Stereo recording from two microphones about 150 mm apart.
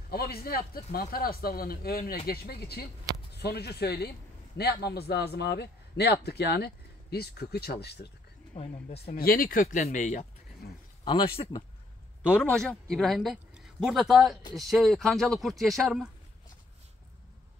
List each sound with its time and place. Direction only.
0.1 s a man's voice: 90° left
8.5 s speech: 45° left (ahead or behind)
9.1 s speech: 75° left (ahead or behind); by 10.2 s 55° left (ahead or behind)
11.1 s speech: 40° left (ahead or behind)
12.3 s speech: 10° left (ahead or behind)